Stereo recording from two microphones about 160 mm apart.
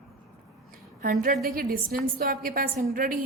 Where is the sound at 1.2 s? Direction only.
65° right (ahead or behind).